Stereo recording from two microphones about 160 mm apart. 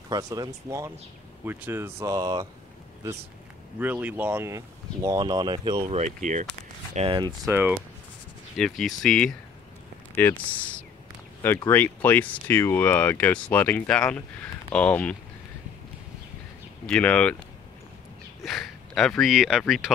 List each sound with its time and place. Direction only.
0.1 s speech: 25° right (ahead or behind)
3.8 s speech: 10° right (ahead or behind)
5.9 s speech: 45° right (ahead or behind)
7.0 s speech: 30° right (ahead or behind)
8.5 s speech: centre (ahead or behind)
16.8 s speech: 5° left (ahead or behind)
18.4 s speech: centre (ahead or behind)